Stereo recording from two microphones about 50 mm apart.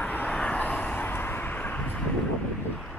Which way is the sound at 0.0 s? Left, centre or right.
Left.